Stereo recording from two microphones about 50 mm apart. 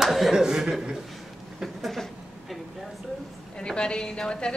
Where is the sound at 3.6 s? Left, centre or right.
Centre.